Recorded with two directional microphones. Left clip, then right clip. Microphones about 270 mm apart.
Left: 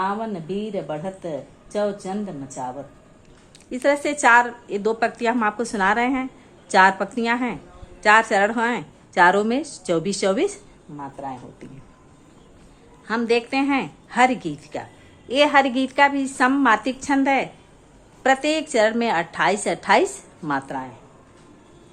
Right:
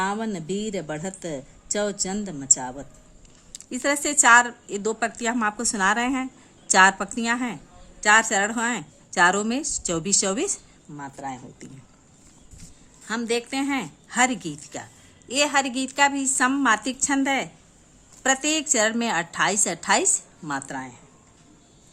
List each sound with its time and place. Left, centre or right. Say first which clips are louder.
0.0 s a woman's voice: left 2 dB; right
13.1 s a woman's voice: left 5 dB; centre